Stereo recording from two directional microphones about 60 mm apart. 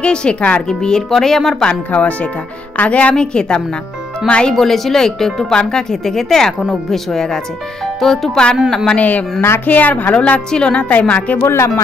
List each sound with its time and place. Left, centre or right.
0.0 s speech: centre
1.7 s a woman's voice: left
8.9 s a woman's voice: left
11.3 s speech: left